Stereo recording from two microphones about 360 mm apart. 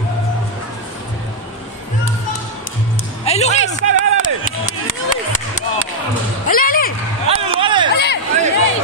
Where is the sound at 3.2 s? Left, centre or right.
Centre.